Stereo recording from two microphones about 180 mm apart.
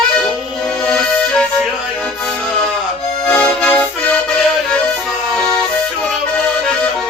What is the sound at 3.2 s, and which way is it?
Accordion, 5° left (ahead or behind).